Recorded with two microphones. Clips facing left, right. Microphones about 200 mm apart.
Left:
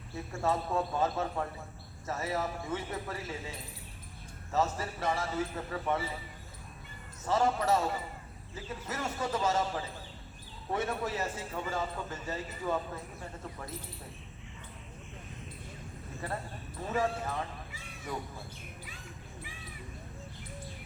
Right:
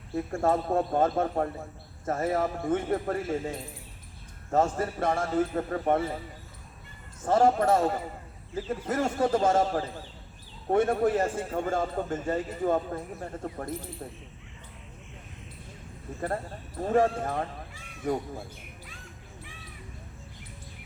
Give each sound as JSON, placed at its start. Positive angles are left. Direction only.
{"t": 0.3, "sound": "a man's voice", "side_deg": -50}
{"t": 7.2, "sound": "a man's voice", "side_deg": -50}
{"t": 16.2, "sound": "a man's voice", "side_deg": -50}